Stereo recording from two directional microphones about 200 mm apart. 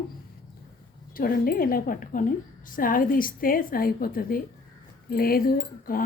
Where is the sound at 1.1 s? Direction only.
45° left (ahead or behind).